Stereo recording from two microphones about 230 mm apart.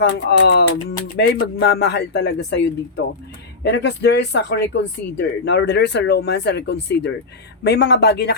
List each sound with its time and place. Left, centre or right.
0.0 s speech: left